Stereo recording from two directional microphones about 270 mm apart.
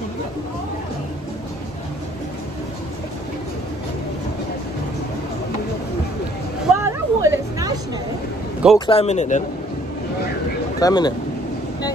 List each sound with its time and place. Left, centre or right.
6.8 s hubbub: centre
8.7 s speech: centre
10.8 s speech: centre